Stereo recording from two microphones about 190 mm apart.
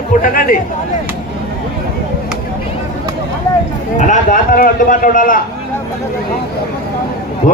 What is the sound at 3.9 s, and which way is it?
A man's voice, 40° left (ahead or behind).